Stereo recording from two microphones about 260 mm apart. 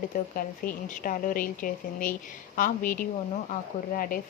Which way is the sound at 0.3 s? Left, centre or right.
Left.